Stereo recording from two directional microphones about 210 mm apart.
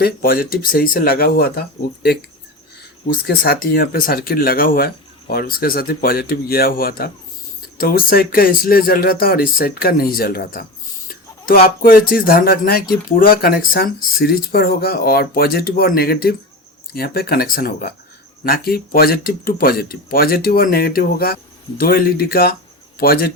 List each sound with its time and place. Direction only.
0.0 s speech: 45° left (ahead or behind)
3.2 s speech: 45° left (ahead or behind)